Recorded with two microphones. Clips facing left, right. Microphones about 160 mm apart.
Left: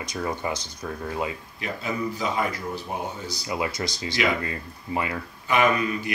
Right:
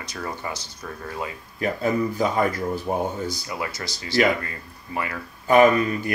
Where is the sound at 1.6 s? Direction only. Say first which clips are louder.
Right 7 dB; 45° right (ahead or behind).